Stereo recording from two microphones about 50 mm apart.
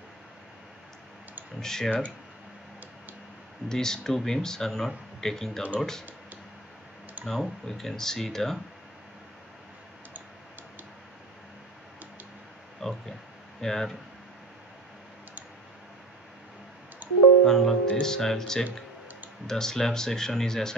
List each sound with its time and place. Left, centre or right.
1.6 s speech: centre
3.6 s speech: centre
7.2 s speech: centre
12.8 s speech: centre
17.0 s music: right
17.5 s music: centre
18.0 s speech: centre